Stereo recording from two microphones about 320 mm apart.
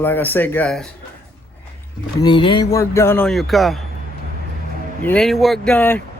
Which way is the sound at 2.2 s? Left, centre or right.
Centre.